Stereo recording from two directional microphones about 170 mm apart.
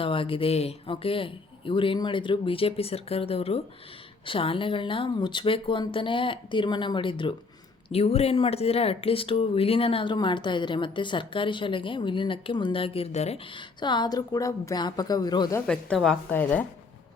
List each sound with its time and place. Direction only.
0.0 s speech: 30° left (ahead or behind)
15.6 s a woman's voice: 5° left (ahead or behind)